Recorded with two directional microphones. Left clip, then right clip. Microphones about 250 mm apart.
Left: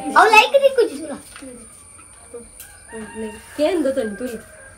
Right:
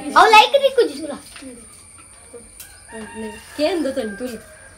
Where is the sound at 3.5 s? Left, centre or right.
Centre.